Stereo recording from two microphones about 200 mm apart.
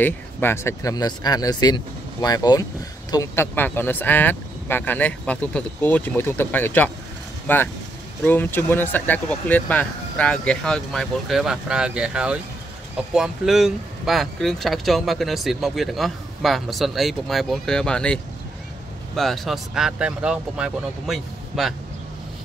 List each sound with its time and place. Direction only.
0.0 s speech: 10° left (ahead or behind)